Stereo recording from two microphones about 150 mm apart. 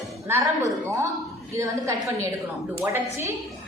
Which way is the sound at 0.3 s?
20° right (ahead or behind).